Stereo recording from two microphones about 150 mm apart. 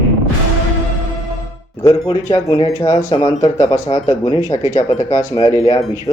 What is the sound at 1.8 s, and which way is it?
Speech, 25° left (ahead or behind).